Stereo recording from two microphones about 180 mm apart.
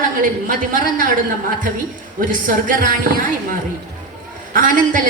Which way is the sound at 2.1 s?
50° right (ahead or behind).